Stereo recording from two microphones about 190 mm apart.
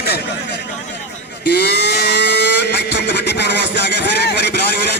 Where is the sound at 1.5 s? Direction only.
60° left (ahead or behind).